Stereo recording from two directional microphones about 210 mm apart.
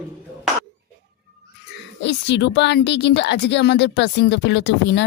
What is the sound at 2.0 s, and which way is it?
Speech, 55° left (ahead or behind).